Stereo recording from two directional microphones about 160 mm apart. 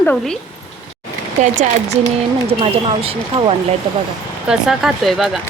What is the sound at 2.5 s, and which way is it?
Speech, 40° right (ahead or behind).